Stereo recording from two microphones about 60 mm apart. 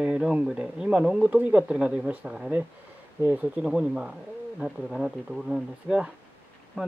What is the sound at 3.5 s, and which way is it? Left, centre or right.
Speech, centre.